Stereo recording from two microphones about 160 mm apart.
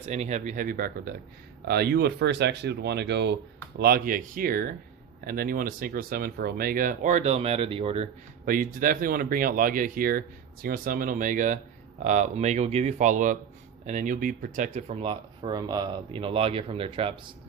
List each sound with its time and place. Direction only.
0.0 s speech: 45° right (ahead or behind); by 1.1 s 65° right (ahead or behind)
1.6 s speech: 85° right
3.8 s speech: 75° right (ahead or behind); by 8.0 s 35° right (ahead or behind)
8.4 s speech: 60° right (ahead or behind); by 17.2 s 35° right (ahead or behind)